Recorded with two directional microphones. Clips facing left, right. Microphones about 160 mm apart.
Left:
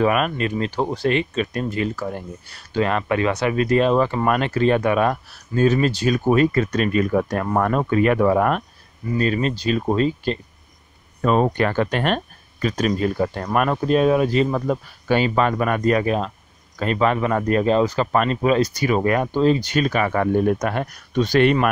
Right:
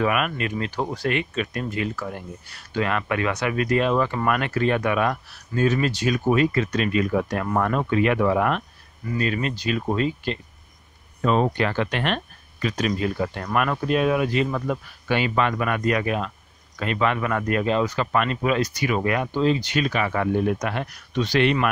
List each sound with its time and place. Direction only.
0.0 s speech: 35° left (ahead or behind)
9.0 s speech: 30° left (ahead or behind)
11.2 s speech: 45° left (ahead or behind)